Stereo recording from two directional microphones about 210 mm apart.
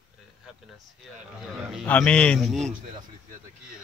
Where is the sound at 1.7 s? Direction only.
5° left (ahead or behind).